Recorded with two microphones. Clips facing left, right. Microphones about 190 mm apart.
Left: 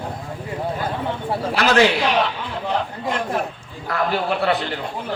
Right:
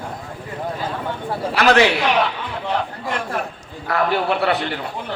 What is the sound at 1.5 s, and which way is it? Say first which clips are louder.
Speech: right 4 dB; 55° right (ahead or behind).